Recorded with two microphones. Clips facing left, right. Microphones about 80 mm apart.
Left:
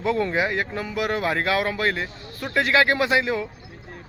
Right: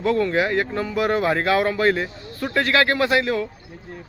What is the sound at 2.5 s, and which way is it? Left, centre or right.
Speech, centre.